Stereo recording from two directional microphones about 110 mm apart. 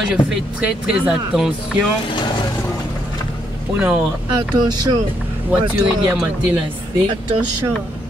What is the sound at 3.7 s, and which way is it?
Speech, 10° right (ahead or behind).